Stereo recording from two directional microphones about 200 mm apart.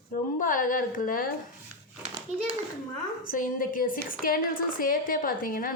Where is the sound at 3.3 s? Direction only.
40° left (ahead or behind).